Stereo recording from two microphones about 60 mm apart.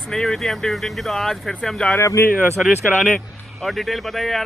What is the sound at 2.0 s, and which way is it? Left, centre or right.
Speech, left.